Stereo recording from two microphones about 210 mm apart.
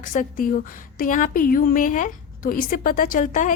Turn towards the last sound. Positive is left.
turn(degrees=35)  # may be behind; listen again after turning